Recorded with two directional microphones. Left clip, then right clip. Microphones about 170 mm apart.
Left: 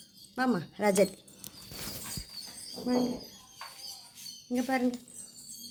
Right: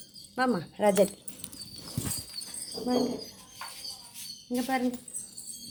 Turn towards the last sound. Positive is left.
turn(degrees=15)  # may be behind; listen again after turning